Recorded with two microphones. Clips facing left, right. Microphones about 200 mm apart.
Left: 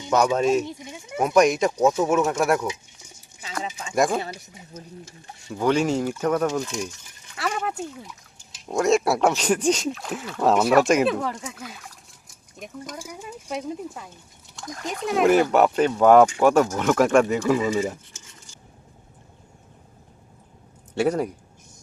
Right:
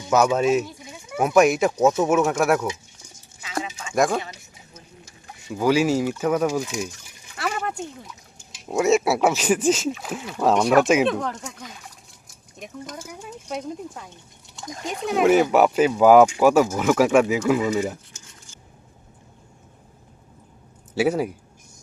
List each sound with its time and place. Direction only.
0.1 s speech: 5° right (ahead or behind)
0.7 s bleat: 25° left (ahead or behind)
1.2 s speech: 5° right (ahead or behind)
3.9 s speech: centre (ahead or behind)
4.2 s a sound: 35° left (ahead or behind)
5.5 s speech: 5° right (ahead or behind)
7.3 s a sound: centre (ahead or behind)
8.5 s speech: 5° right (ahead or behind)
20.9 s speech: 5° right (ahead or behind)